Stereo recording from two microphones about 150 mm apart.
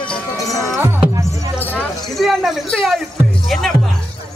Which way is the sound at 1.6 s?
10° left (ahead or behind).